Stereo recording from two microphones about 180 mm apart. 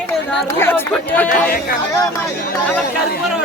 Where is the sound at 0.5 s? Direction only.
10° left (ahead or behind).